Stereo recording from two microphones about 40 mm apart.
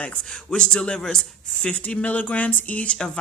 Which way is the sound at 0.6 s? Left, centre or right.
Left.